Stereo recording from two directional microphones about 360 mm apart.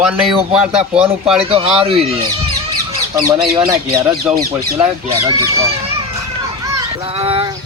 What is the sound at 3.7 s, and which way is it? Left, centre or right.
Speech, centre.